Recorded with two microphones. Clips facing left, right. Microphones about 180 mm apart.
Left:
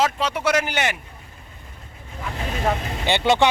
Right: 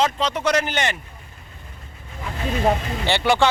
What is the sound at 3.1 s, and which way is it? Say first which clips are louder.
Speech: left 1 dB; 20° left (ahead or behind).